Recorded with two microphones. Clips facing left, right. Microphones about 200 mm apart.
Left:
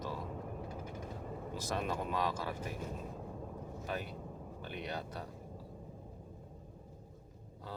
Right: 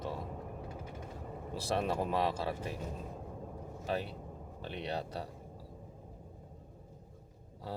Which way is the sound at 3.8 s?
30° right (ahead or behind).